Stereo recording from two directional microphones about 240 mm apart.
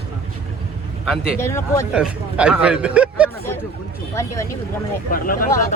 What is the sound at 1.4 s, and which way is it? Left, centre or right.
Speech, centre.